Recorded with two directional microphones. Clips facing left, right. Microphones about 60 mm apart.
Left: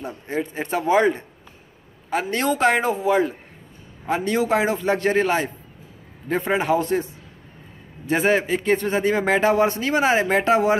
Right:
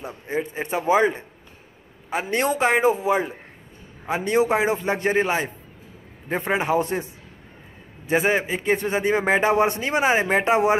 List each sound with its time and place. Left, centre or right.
0.0 s a man's voice: centre
2.6 s a man's voice: centre
8.1 s a man's voice: centre